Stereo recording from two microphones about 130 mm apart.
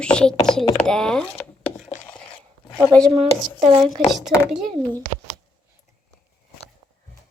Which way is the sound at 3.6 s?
35° right (ahead or behind).